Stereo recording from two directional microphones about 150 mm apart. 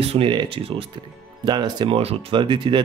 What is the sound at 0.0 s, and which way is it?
Speech, 40° right (ahead or behind).